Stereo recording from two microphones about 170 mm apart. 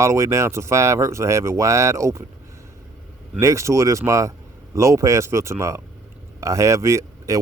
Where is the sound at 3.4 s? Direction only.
15° right (ahead or behind).